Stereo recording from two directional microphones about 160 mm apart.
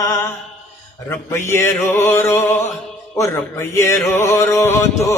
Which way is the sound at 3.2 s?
20° left (ahead or behind).